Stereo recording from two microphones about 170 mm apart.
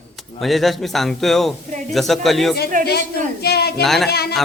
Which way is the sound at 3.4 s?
70° left (ahead or behind).